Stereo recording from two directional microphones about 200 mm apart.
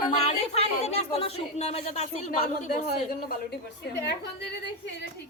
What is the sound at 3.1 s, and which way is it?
A woman's voice, 50° left (ahead or behind).